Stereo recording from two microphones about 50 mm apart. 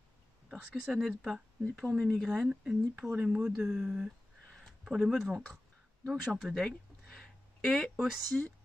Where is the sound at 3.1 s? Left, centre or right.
Centre.